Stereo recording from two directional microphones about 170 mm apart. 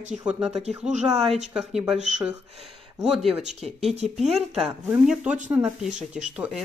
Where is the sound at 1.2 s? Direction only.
40° right (ahead or behind).